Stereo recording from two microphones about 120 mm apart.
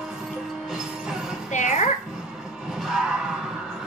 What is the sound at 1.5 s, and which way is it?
Music, 90° left.